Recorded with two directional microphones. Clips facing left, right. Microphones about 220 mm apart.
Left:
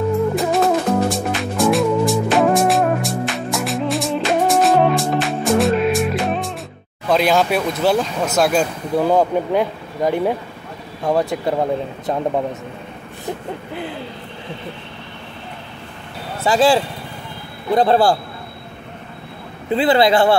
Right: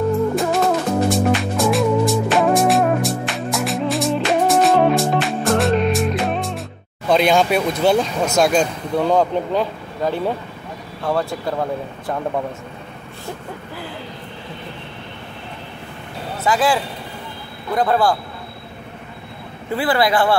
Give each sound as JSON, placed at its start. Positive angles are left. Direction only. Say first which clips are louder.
{"t": 0.4, "sound": "music", "louder": "left 1 dB", "side_deg": 0}
{"t": 7.1, "sound": "speech", "louder": "right 1 dB", "side_deg": 0}
{"t": 16.4, "sound": "speech", "louder": "left 4 dB", "side_deg": 30}
{"t": 19.7, "sound": "speech", "louder": "left 4 dB", "side_deg": 20}